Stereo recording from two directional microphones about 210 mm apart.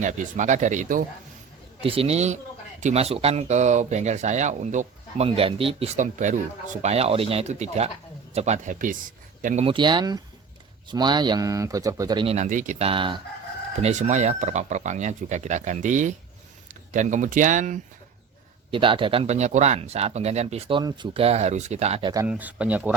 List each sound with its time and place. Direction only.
0.0 s speech: 35° right (ahead or behind)
1.8 s speech: 25° right (ahead or behind)
9.6 s speech: 20° right (ahead or behind); by 17.7 s 35° right (ahead or behind)
18.7 s speech: 25° right (ahead or behind)
22.3 s speech: 5° right (ahead or behind)